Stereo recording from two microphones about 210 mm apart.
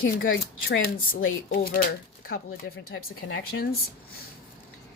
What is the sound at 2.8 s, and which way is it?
Speech, 45° left (ahead or behind).